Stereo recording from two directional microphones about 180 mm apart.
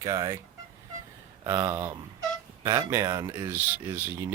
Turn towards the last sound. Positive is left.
turn(degrees=-10)  # may be behind; listen again after turning